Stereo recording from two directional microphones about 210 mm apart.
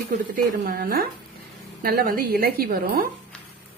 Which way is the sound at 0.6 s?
45° right (ahead or behind).